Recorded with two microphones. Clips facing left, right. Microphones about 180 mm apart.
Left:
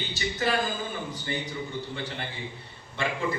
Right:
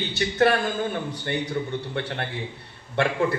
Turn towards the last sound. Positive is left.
turn(degrees=-65)  # may be behind; listen again after turning